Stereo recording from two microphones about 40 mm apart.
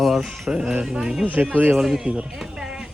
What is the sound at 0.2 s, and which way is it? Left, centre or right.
Music, centre.